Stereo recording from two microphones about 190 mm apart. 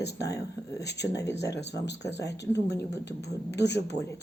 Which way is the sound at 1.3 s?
65° left (ahead or behind).